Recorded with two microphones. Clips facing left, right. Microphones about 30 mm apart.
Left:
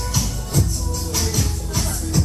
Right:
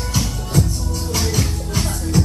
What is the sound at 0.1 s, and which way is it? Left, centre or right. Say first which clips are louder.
Music: right 4 dB; right.